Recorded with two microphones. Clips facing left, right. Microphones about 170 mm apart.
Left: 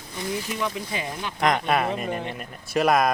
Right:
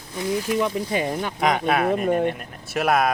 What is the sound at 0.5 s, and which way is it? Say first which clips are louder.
Speech: right 6 dB; 50° right (ahead or behind).